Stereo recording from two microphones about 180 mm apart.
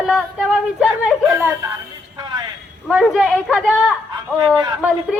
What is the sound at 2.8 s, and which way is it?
A woman's voice, centre (ahead or behind).